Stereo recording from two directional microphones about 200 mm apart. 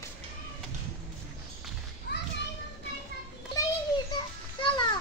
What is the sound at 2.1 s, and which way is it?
Children playing, 55° left (ahead or behind).